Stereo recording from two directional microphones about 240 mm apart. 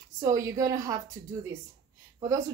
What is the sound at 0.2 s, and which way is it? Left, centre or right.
Speech, centre.